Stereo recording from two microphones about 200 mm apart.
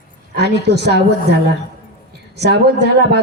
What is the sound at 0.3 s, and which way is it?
Speech, 55° right (ahead or behind).